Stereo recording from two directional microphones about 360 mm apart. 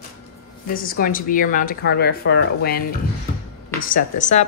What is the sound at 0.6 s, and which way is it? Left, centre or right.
Speech, left.